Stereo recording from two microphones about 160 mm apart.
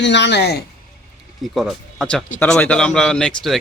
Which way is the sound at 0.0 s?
90° left.